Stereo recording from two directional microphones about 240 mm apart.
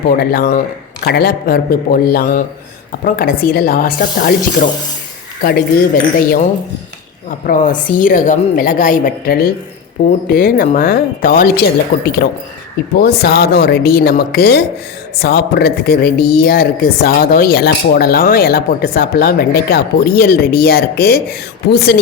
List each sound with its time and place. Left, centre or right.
0.2 s a woman's voice: left